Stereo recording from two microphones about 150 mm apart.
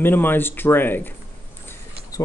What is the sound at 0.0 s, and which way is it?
Speech, 15° left (ahead or behind).